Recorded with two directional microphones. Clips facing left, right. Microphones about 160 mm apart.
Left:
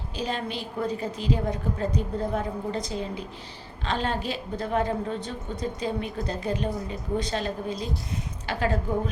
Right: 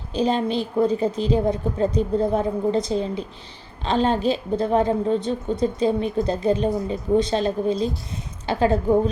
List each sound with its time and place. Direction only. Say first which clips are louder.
0.2 s a woman's voice: right 9 dB; 30° right (ahead or behind)